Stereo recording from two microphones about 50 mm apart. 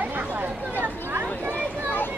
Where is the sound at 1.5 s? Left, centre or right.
Left.